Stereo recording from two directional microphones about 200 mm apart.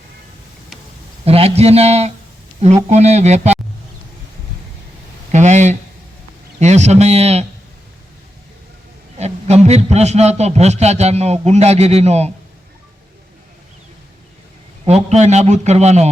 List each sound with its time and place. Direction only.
1.2 s a man's voice: 30° right (ahead or behind)
5.3 s a sound: 35° right (ahead or behind)
6.6 s a man's voice: 35° right (ahead or behind)
9.1 s a man's voice: 35° right (ahead or behind)
14.8 s a man's voice: 35° right (ahead or behind)